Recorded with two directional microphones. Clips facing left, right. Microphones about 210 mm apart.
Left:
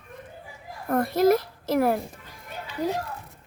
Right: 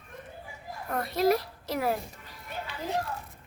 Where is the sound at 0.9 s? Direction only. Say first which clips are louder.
Left 6 dB; 50° left (ahead or behind).